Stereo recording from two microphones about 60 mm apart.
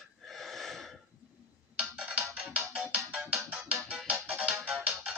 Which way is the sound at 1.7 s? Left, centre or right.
Right.